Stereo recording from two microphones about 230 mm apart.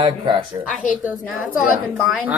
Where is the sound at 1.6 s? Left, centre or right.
Centre.